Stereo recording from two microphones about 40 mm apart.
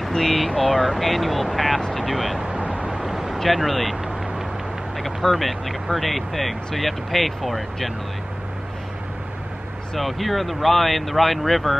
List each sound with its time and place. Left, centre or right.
0.1 s speech: centre
2.5 s vehicle: right
2.9 s vehicle: centre
3.3 s speech: centre
4.9 s speech: centre
9.9 s speech: centre